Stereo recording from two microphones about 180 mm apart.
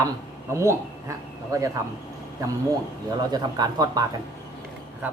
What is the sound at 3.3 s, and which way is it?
Speech, 20° right (ahead or behind).